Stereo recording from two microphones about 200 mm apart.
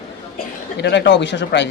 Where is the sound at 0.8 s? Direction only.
60° left (ahead or behind).